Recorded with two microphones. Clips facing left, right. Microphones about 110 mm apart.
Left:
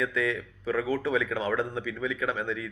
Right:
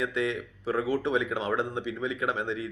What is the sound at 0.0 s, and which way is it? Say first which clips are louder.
Speech: even; 25° right (ahead or behind).